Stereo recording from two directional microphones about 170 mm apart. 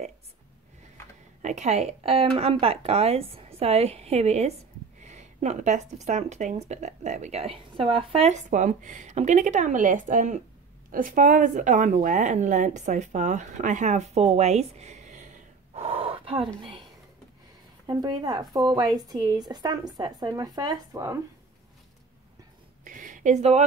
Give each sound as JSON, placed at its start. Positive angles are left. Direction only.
{"t": 1.4, "sound": "a woman's voice", "side_deg": -45}
{"t": 15.7, "sound": "gasp", "side_deg": -35}
{"t": 17.8, "sound": "speech", "side_deg": -25}
{"t": 22.8, "sound": "a sound", "side_deg": -50}